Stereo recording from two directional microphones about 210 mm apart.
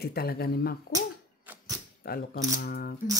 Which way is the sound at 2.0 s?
45° left (ahead or behind).